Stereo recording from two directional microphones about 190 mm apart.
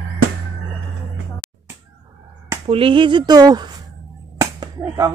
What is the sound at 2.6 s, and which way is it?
Speech, 30° right (ahead or behind).